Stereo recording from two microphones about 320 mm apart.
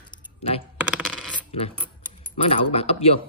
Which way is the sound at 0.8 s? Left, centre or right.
Centre.